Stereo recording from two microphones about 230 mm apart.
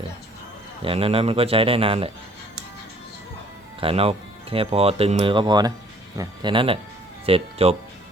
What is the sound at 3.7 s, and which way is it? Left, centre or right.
Speech, right.